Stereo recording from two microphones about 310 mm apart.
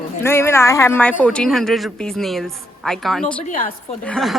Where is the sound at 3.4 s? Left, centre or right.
Left.